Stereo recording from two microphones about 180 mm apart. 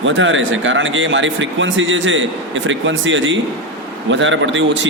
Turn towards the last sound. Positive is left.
turn(degrees=-90)